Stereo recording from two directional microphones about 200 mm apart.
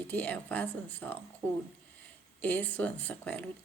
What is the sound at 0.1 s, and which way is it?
Speech, 10° left (ahead or behind).